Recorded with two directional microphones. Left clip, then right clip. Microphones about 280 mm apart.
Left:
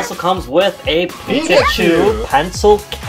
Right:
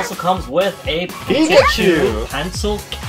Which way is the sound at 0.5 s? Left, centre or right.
Centre.